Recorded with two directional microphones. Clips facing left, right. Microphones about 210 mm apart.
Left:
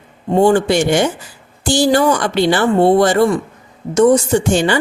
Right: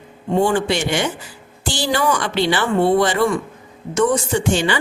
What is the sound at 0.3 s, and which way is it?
Speech, 40° left (ahead or behind).